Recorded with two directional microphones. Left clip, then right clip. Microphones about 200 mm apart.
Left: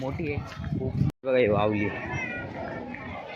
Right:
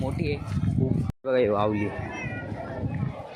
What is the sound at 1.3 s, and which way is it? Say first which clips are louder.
Speech: even; 5° right (ahead or behind).